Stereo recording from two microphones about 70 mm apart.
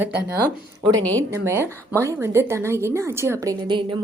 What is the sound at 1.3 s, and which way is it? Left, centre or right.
Speech, right.